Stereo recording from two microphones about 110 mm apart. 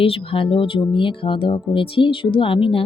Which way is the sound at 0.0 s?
60° left (ahead or behind).